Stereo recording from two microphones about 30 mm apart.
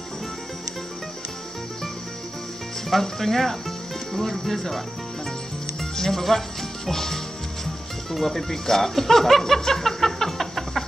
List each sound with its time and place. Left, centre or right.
2.9 s speech: centre
5.8 s music: centre
6.9 s speech: centre